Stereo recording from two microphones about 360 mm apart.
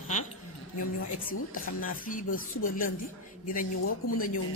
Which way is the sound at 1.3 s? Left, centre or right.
Left.